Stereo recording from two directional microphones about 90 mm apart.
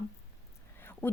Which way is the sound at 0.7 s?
20° left (ahead or behind).